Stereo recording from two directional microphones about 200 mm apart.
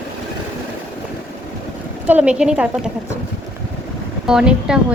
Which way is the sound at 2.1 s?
5° right (ahead or behind).